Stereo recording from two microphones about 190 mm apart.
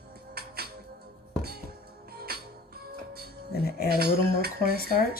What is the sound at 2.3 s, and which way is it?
Music, 55° right (ahead or behind).